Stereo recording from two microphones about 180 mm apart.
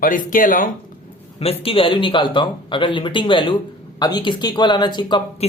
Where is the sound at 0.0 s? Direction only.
50° left (ahead or behind).